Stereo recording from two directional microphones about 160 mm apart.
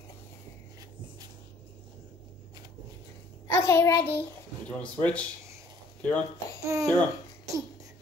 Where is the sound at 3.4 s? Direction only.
15° left (ahead or behind).